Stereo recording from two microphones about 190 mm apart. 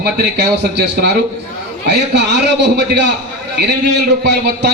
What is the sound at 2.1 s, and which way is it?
A man's voice, 65° right (ahead or behind).